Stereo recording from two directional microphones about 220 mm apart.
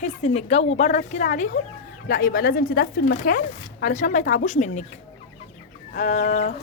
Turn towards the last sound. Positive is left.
turn(degrees=30)  # may be behind; listen again after turning